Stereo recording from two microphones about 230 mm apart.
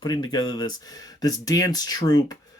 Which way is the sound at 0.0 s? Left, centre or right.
Centre.